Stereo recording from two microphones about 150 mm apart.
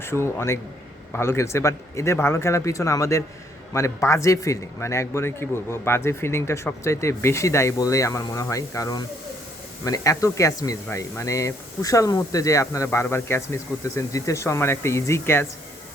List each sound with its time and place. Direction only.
0.0 s a man's voice: 15° left (ahead or behind)